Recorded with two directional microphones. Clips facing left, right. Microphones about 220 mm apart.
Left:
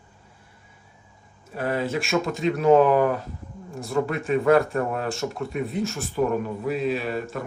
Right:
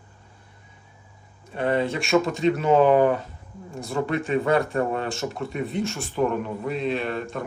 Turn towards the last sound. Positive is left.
turn(degrees=5)  # may be behind; listen again after turning